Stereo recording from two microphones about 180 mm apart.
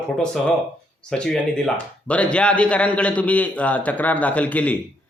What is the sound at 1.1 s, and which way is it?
Speech, 5° left (ahead or behind).